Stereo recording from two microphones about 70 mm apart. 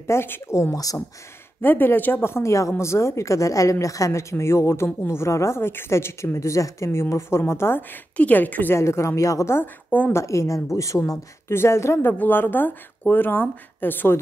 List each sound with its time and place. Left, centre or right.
0.0 s a woman's voice: left
2.3 s a woman's voice: left
8.7 s speech: left
9.8 s a woman's voice: left
10.1 s a woman's voice: left